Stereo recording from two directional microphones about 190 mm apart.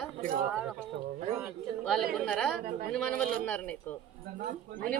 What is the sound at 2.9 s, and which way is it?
Speech, 5° left (ahead or behind).